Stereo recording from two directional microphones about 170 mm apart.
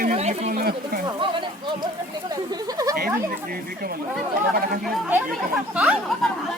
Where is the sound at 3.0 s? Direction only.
60° right (ahead or behind).